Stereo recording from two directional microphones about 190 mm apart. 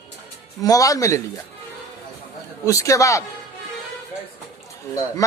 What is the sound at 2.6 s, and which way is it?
Speech, 15° left (ahead or behind).